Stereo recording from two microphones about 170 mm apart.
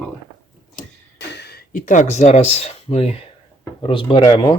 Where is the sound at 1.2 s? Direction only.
80° left; by 4.6 s 25° left (ahead or behind).